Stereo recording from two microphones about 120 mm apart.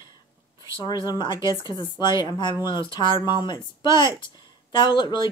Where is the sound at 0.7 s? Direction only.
40° left (ahead or behind).